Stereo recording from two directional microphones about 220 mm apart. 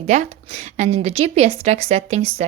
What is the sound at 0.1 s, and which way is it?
A woman's voice, 30° right (ahead or behind).